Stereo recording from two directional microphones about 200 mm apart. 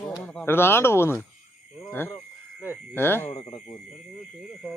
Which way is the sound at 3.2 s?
30° left (ahead or behind).